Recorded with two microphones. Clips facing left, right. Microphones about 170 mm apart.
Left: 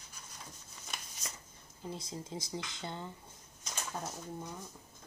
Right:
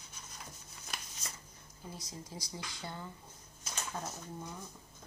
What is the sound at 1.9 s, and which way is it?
Speech, 25° left (ahead or behind).